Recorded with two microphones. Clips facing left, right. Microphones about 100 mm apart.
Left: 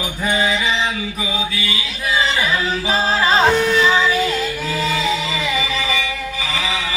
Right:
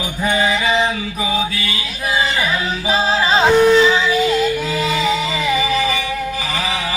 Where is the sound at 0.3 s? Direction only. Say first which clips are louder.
Right 2 dB; 35° right (ahead or behind).